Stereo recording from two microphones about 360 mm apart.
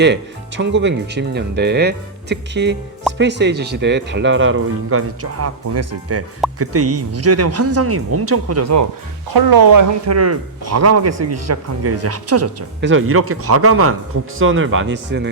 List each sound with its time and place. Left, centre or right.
0.0 s speech: right
9.3 s speech: right
10.1 s speech: right